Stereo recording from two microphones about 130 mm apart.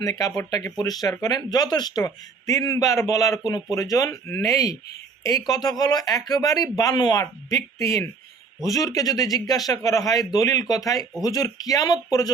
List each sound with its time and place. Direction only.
0.0 s a man's voice: 25° left (ahead or behind)